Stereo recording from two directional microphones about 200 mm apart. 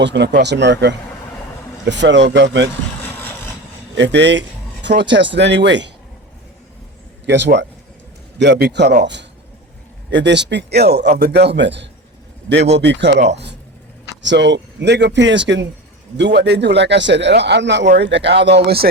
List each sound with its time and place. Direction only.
0.0 s a man's voice: 60° right (ahead or behind)
3.1 s vehicle: 10° left (ahead or behind)
3.9 s speech: 60° right (ahead or behind)
7.3 s a man's voice: 60° right (ahead or behind)
10.1 s a man's voice: 60° right (ahead or behind)
11.0 s a man's voice: 35° right (ahead or behind)
11.3 s a man's voice: 55° right (ahead or behind)